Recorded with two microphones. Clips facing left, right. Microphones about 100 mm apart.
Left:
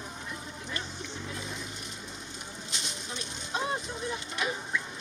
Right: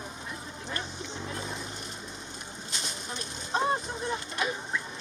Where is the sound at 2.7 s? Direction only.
40° right (ahead or behind).